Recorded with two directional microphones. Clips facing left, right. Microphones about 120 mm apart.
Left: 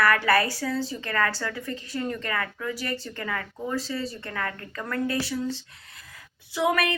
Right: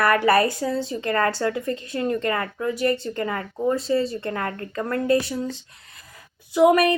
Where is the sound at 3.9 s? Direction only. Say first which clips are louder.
Right 9 dB; 55° right (ahead or behind).